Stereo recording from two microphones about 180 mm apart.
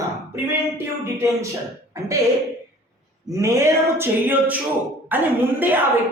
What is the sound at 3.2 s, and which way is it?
Speech, 15° right (ahead or behind).